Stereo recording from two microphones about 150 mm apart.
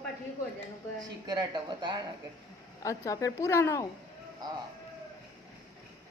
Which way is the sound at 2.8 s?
20° left (ahead or behind).